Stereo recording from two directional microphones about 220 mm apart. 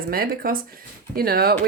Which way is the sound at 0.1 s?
40° right (ahead or behind).